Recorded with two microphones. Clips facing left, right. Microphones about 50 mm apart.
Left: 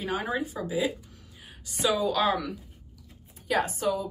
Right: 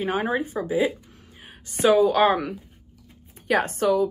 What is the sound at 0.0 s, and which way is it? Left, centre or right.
A woman's voice, right.